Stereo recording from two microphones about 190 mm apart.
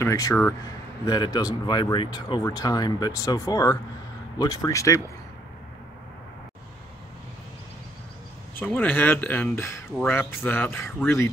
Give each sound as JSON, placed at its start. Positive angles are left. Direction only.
{"t": 0.0, "sound": "speech", "side_deg": 15}
{"t": 8.5, "sound": "speech", "side_deg": 10}